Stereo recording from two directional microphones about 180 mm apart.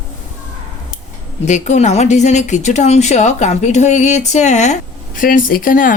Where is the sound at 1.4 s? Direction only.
40° left (ahead or behind).